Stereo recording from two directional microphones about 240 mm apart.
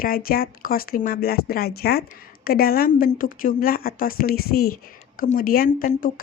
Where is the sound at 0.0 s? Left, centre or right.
Left.